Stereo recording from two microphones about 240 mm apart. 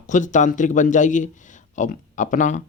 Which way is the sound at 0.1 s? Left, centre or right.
Left.